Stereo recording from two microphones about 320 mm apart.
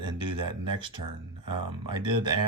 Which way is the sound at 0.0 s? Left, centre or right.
Centre.